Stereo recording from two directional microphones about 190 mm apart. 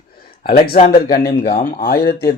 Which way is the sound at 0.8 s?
30° left (ahead or behind).